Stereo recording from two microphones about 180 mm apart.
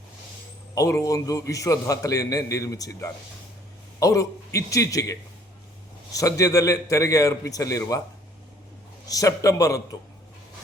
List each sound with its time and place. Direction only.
0.8 s a man's voice: 15° left (ahead or behind)
6.1 s a man's voice: 20° left (ahead or behind)
9.0 s a man's voice: 20° left (ahead or behind)